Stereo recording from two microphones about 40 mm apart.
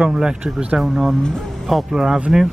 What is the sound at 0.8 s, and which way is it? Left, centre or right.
Speech, centre.